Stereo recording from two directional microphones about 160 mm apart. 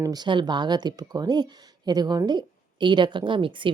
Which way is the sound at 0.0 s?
25° right (ahead or behind).